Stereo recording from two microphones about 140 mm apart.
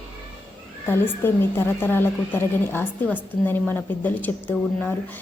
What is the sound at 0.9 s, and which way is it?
A woman's voice, 15° left (ahead or behind).